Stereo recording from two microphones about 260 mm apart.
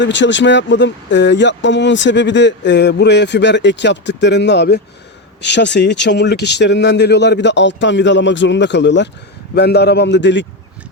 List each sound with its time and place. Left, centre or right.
0.0 s speech: left